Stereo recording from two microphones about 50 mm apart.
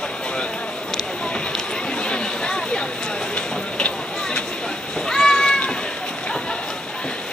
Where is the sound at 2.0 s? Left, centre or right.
Centre.